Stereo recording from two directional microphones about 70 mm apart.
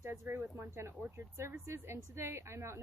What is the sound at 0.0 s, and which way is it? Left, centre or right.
A woman's voice, right.